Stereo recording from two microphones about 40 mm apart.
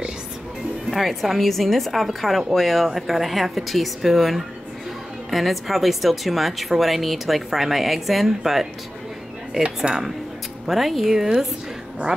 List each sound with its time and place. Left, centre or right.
0.8 s a woman's voice: centre
9.9 s speech: right
10.7 s a woman's voice: centre